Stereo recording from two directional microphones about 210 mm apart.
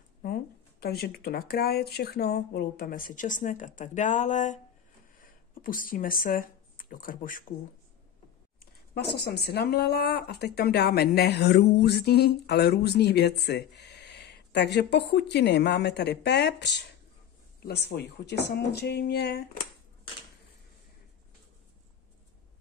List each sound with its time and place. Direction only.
0.2 s speech: 45° left (ahead or behind)
8.9 s speech: 50° left (ahead or behind)